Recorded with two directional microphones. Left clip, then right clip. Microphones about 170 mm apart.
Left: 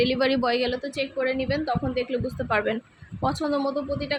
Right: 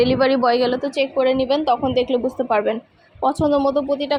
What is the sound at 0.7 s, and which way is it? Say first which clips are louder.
Speech: right 8 dB; 15° right (ahead or behind).